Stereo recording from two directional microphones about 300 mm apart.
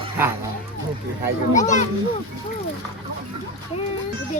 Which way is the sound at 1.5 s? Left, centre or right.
Left.